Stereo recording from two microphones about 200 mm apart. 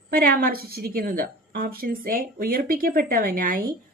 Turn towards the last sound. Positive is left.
turn(degrees=-45)  # may be behind; listen again after turning